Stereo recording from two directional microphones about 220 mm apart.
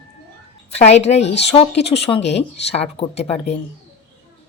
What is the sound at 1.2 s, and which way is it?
Speech, 50° left (ahead or behind).